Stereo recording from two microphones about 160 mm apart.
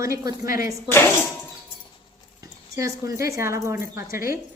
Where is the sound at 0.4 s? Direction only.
60° left (ahead or behind).